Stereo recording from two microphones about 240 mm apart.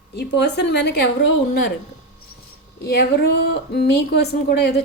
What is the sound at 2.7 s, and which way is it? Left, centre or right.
A woman's voice, left.